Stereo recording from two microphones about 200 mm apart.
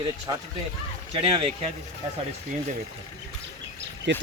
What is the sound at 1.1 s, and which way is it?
Speech, 25° right (ahead or behind).